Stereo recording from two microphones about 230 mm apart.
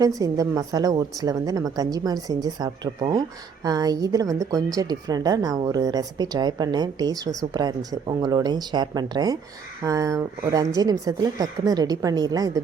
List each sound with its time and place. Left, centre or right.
0.0 s a woman's voice: centre